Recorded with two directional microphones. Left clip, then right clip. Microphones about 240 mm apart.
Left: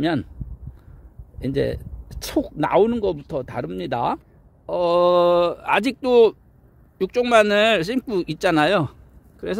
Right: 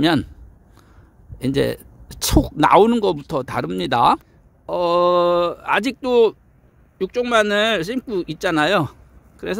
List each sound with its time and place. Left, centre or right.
0.0 s speech: right
1.4 s speech: right